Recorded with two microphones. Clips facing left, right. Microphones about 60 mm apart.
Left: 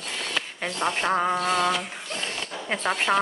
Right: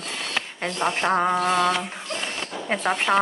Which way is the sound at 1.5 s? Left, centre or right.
Right.